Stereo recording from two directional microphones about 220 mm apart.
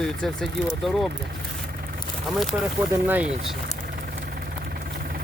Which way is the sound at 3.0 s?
10° right (ahead or behind).